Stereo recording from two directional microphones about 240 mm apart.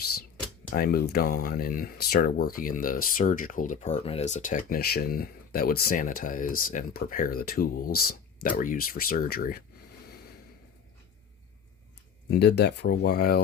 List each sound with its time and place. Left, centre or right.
0.7 s speech: left
12.4 s speech: left